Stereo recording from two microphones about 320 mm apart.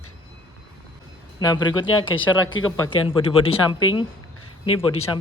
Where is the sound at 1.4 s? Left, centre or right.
Centre.